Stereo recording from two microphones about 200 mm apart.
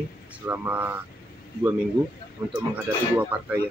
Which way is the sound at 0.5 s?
10° right (ahead or behind).